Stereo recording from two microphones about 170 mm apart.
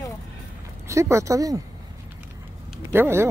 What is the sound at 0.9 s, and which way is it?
Speech, 15° right (ahead or behind).